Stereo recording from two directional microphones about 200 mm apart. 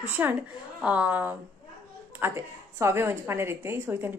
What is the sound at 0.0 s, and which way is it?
A woman's voice, 10° right (ahead or behind).